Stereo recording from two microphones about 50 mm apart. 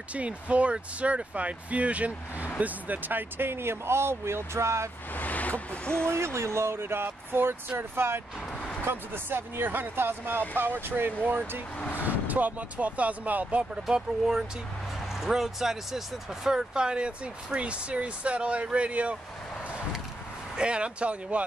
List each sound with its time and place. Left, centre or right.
0.1 s speech: right
5.1 s speech: left
6.0 s speech: right
13.8 s speech: centre
20.5 s speech: right